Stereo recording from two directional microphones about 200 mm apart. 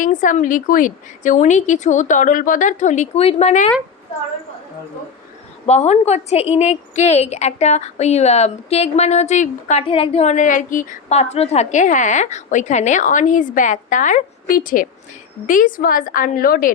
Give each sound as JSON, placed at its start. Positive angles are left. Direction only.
{"t": 0.0, "sound": "a woman's voice", "side_deg": 40}
{"t": 5.6, "sound": "a woman's voice", "side_deg": 35}